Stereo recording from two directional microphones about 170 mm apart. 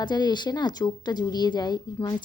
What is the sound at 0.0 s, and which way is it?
Speech, 25° left (ahead or behind).